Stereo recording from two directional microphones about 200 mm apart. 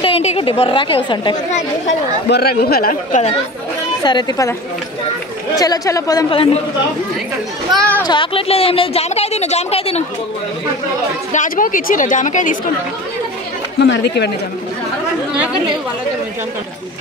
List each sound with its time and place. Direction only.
0.0 s a woman's voice: 30° left (ahead or behind)
1.3 s a woman's voice: 35° left (ahead or behind)
2.2 s speech: 55° left (ahead or behind)
4.0 s speech: 20° left (ahead or behind)
5.6 s speech: 15° left (ahead or behind)
7.7 s speech: 5° left (ahead or behind)
8.0 s speech: 25° left (ahead or behind)
11.3 s a woman's voice: 40° left (ahead or behind)
13.7 s speech: 60° left (ahead or behind)